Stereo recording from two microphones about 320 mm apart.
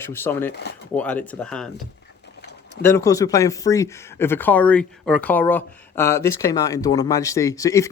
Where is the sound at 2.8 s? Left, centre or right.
Centre.